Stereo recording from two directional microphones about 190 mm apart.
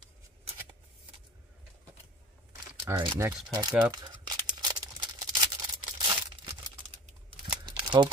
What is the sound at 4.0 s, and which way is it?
Crumpling, 20° right (ahead or behind).